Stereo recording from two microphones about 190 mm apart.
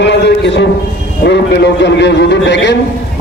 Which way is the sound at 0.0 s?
65° left (ahead or behind).